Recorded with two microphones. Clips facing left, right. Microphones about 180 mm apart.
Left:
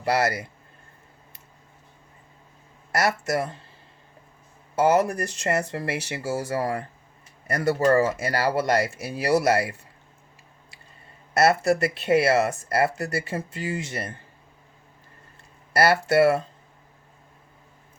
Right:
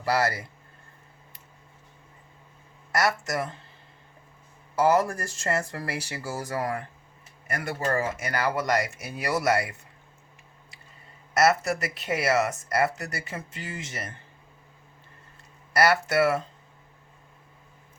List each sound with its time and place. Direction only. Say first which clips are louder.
0.0 s speech: left 2 dB; 20° left (ahead or behind)
2.9 s speech: left 2 dB; 25° left (ahead or behind)
4.7 s speech: left 2 dB; 25° left (ahead or behind)
11.3 s speech: left 3 dB; 30° left (ahead or behind)
15.7 s speech: left 3 dB; 30° left (ahead or behind)